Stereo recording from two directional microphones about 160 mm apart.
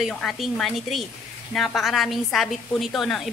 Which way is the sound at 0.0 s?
Centre (ahead or behind).